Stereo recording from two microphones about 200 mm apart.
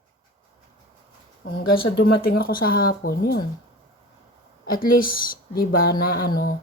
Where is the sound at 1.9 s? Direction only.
50° left (ahead or behind).